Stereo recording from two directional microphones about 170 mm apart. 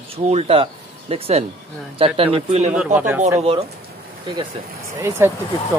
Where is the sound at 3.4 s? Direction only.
35° right (ahead or behind).